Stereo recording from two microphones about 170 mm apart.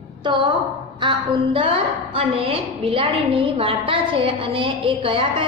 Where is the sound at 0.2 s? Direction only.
30° right (ahead or behind).